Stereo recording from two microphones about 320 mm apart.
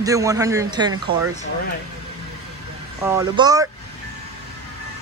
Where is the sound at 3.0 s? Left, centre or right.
Centre.